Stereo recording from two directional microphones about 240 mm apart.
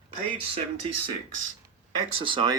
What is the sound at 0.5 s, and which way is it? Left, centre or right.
Speech, right.